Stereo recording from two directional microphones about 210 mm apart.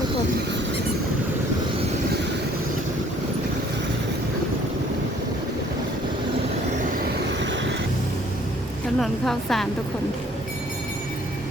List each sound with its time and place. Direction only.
9.0 s a woman's voice: centre (ahead or behind)